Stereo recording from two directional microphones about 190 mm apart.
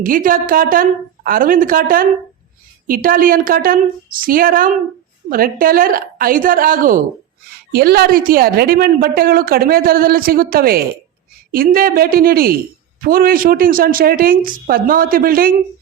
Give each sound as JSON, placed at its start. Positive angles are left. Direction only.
{"t": 0.0, "sound": "a woman's voice", "side_deg": -45}